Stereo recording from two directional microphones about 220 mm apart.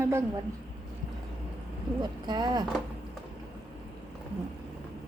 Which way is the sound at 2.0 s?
20° right (ahead or behind).